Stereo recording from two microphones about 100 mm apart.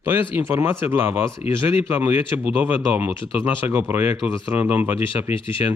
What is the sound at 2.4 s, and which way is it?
Speech, 15° right (ahead or behind).